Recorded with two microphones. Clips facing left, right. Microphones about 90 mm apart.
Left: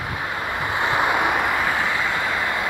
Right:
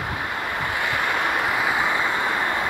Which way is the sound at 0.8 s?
20° left (ahead or behind).